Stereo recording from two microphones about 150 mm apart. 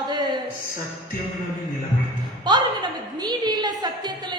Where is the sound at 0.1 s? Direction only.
30° right (ahead or behind).